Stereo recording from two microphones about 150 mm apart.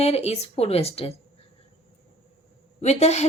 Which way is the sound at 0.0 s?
45° left (ahead or behind).